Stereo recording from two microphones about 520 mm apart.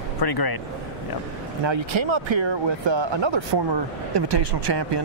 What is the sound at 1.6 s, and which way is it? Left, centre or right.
Speech, right.